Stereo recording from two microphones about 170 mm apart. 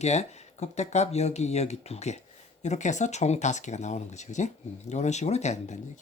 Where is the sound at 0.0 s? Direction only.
40° left (ahead or behind).